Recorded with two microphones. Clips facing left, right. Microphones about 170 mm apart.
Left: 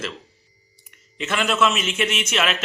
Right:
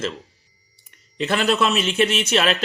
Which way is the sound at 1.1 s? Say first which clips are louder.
Right 2 dB; 35° right (ahead or behind).